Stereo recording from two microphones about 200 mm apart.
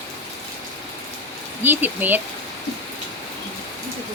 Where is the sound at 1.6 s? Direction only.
10° right (ahead or behind).